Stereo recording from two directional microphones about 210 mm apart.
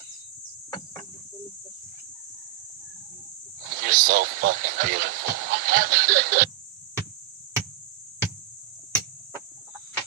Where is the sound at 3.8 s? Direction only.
40° right (ahead or behind).